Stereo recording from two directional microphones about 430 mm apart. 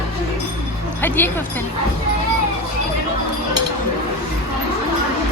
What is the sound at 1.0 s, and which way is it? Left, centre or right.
Speech, centre.